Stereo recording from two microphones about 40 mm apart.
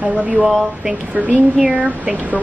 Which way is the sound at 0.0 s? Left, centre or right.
Right.